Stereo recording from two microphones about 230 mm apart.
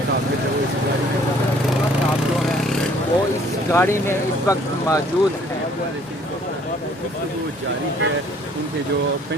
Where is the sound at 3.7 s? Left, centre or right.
Centre.